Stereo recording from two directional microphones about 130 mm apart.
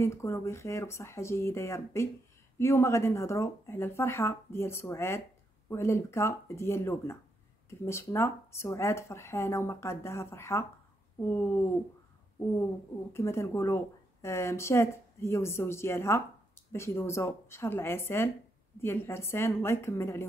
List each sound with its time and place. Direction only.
0.0 s a woman's voice: 20° left (ahead or behind)
13.1 s a woman's voice: 20° left (ahead or behind)